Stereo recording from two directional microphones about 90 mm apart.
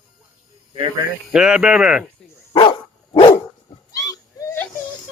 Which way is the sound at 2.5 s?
65° left (ahead or behind).